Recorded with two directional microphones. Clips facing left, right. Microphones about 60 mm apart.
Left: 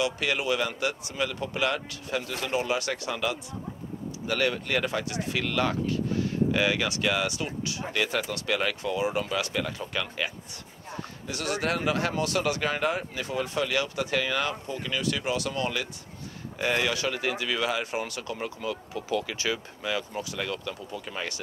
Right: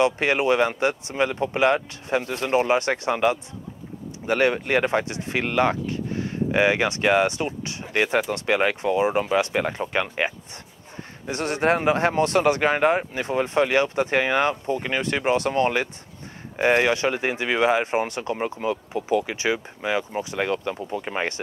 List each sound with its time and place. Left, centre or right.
0.0 s speech: right